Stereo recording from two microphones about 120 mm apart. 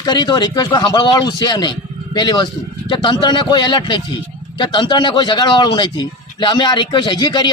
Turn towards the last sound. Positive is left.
turn(degrees=40)  # may be behind; listen again after turning